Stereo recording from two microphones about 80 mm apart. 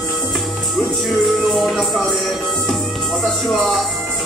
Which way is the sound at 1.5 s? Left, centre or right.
Centre.